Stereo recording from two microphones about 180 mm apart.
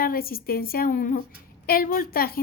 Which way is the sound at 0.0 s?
55° left (ahead or behind).